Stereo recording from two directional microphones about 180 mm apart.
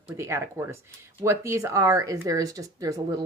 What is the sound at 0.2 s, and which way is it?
Speech, 15° right (ahead or behind).